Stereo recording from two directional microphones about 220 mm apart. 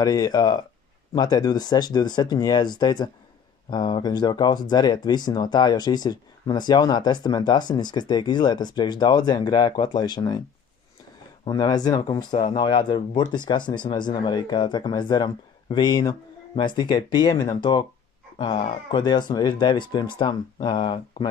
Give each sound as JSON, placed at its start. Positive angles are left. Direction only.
{"t": 0.0, "sound": "speech", "side_deg": 15}
{"t": 11.4, "sound": "speech", "side_deg": 20}
{"t": 18.9, "sound": "speech", "side_deg": 20}